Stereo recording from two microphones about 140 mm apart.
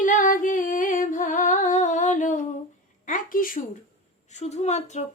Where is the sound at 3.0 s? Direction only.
75° left (ahead or behind).